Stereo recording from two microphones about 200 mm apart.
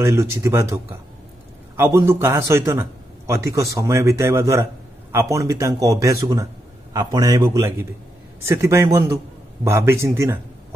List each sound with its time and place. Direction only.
0.0 s a man's voice: 15° right (ahead or behind)
1.8 s a man's voice: 15° right (ahead or behind)